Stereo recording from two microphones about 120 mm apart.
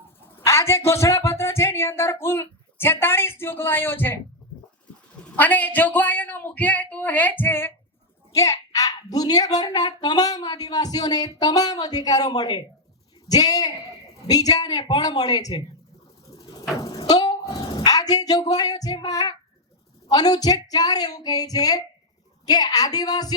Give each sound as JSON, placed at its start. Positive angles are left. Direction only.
{"t": 0.4, "sound": "speech", "side_deg": 25}
{"t": 5.4, "sound": "a man's voice", "side_deg": 15}
{"t": 16.8, "sound": "a sound", "side_deg": 35}
{"t": 20.1, "sound": "a child's voice", "side_deg": 35}